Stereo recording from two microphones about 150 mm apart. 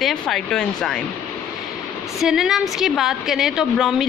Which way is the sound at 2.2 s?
5° right (ahead or behind).